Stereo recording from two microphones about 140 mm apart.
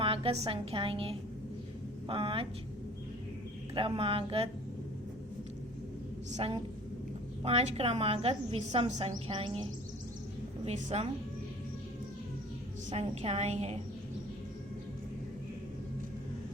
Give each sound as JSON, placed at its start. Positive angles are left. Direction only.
{"t": 0.0, "sound": "a woman's voice", "side_deg": -40}
{"t": 3.8, "sound": "speech", "side_deg": -40}
{"t": 7.4, "sound": "a woman's voice", "side_deg": -50}
{"t": 10.7, "sound": "a woman's voice", "side_deg": -50}
{"t": 12.9, "sound": "a woman's voice", "side_deg": -50}